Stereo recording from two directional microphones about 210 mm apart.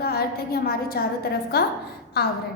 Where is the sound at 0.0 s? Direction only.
45° left (ahead or behind).